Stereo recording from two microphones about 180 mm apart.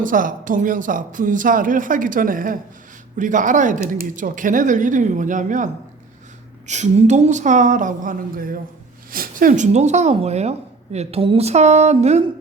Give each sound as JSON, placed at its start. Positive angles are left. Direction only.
{"t": 0.0, "sound": "speech", "side_deg": -50}